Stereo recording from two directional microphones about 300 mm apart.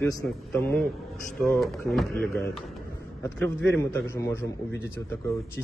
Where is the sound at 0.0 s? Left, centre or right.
Centre.